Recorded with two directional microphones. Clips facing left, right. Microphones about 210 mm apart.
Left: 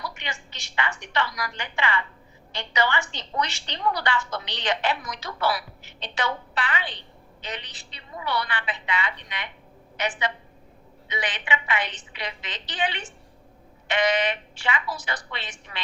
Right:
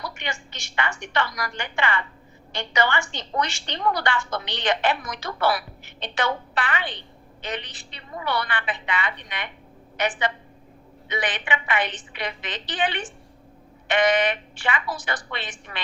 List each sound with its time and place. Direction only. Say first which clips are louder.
0.0 s a woman's voice: right 3 dB; 45° right (ahead or behind)